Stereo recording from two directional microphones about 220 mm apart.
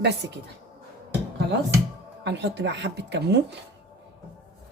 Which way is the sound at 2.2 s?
50° right (ahead or behind).